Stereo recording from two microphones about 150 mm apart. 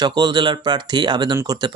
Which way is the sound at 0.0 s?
30° right (ahead or behind).